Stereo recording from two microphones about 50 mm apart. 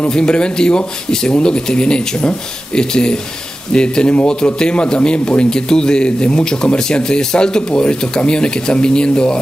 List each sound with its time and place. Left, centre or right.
0.1 s a man's voice: centre